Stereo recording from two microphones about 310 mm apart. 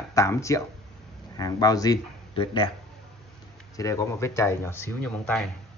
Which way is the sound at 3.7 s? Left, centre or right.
Centre.